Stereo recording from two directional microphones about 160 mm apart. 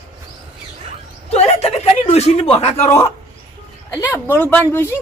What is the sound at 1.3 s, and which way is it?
Speech, 40° left (ahead or behind).